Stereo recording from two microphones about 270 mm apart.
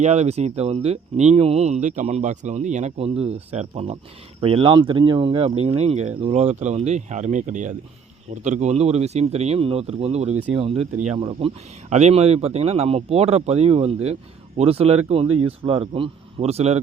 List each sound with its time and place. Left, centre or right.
0.0 s speech: right